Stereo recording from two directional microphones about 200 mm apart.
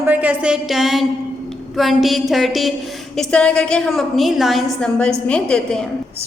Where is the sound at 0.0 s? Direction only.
10° right (ahead or behind).